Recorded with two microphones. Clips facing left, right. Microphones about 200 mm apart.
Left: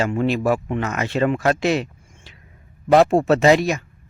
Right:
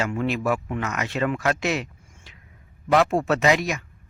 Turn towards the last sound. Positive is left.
turn(degrees=30)  # may be behind; listen again after turning